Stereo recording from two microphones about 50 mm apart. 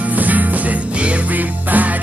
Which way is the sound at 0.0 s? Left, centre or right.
Right.